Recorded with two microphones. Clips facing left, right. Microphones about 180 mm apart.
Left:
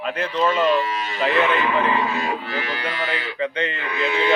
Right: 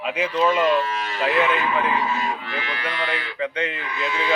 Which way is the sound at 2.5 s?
40° left (ahead or behind).